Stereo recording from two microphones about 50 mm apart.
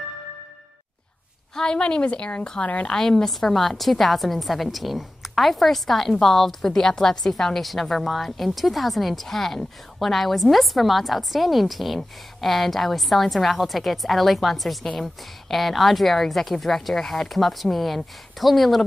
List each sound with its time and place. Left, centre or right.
1.5 s a woman's voice: centre
2.9 s a woman's voice: centre